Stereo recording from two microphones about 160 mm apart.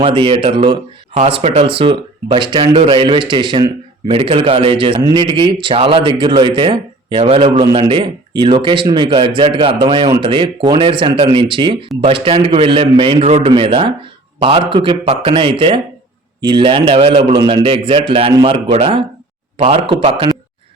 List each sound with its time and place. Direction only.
0.0 s speech: 35° right (ahead or behind)
1.1 s speech: 40° right (ahead or behind)